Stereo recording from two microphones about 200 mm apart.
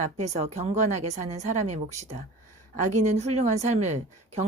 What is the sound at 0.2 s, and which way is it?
Speech, 35° right (ahead or behind).